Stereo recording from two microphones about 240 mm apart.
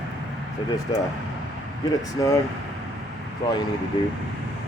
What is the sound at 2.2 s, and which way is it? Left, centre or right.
Speech, centre.